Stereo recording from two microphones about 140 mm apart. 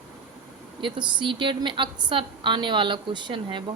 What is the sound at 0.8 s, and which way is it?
A woman's voice, 35° right (ahead or behind).